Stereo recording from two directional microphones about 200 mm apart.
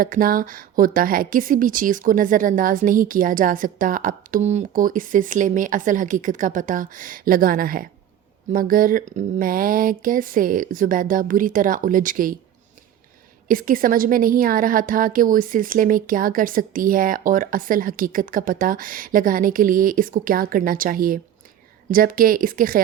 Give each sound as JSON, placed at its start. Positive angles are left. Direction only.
{"t": 0.0, "sound": "speech", "side_deg": -45}
{"t": 13.5, "sound": "speech", "side_deg": -45}